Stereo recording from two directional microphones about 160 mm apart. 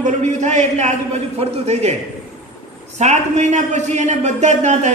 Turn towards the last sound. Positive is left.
turn(degrees=-45)  # may be behind; listen again after turning